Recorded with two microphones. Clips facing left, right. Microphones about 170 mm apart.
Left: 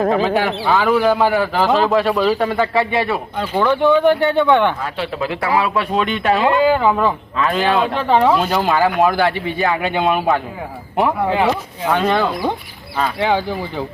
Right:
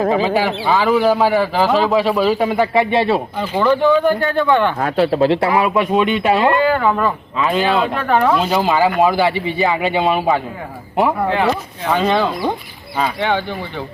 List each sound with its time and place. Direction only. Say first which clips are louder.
0.0 s a man's voice: even; centre (ahead or behind); by 3.2 s 20° right (ahead or behind)
3.3 s a man's voice: left 3 dB; 5° right (ahead or behind)
4.8 s speech: right 8 dB; 50° right (ahead or behind); by 5.9 s 20° right (ahead or behind)
5.9 s a man's voice: right 2 dB; 10° right (ahead or behind)
11.9 s speech: right 1 dB; 15° right (ahead or behind)
13.1 s a man's voice: left 1 dB; 5° left (ahead or behind)